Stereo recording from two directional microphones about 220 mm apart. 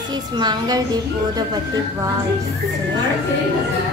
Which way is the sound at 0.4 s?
20° right (ahead or behind).